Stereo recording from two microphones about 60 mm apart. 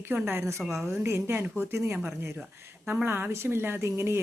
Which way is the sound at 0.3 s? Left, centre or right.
Right.